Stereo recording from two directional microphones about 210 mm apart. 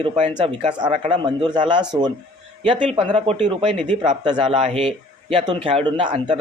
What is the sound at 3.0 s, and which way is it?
A man's voice, 25° right (ahead or behind).